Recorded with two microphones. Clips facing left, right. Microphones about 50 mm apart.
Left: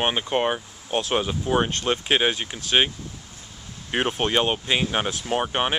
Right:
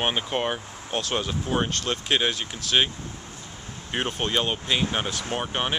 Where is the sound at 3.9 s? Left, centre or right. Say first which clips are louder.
Left 4 dB; centre.